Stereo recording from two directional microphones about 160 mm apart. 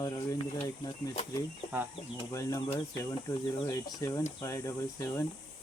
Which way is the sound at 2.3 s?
20° left (ahead or behind).